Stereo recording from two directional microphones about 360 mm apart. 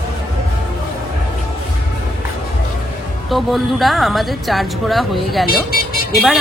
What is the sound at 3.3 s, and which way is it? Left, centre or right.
A woman's voice, centre.